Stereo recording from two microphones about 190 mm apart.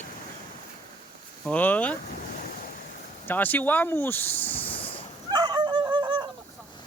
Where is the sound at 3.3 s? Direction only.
10° left (ahead or behind).